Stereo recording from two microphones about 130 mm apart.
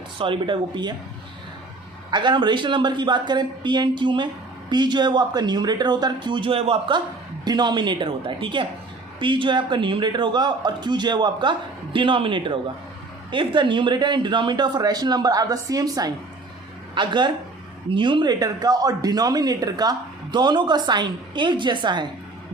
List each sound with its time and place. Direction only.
0.2 s speech: 40° right (ahead or behind)
2.0 s speech: 35° right (ahead or behind)